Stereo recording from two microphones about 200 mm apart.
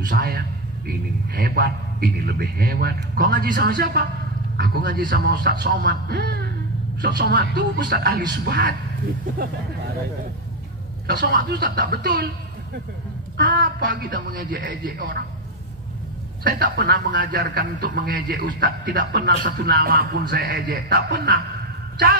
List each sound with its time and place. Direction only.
0.1 s a man's voice: 50° right (ahead or behind)
11.1 s a man's voice: 55° right (ahead or behind)
13.5 s a man's voice: 55° right (ahead or behind)
16.4 s a man's voice: 55° right (ahead or behind)